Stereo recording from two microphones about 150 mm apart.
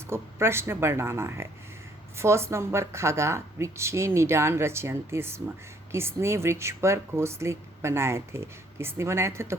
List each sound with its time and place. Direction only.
0.1 s speech: 15° right (ahead or behind)